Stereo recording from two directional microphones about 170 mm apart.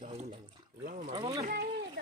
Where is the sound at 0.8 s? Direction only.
60° right (ahead or behind).